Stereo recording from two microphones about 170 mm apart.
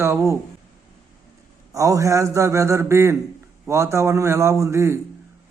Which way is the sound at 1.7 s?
20° right (ahead or behind).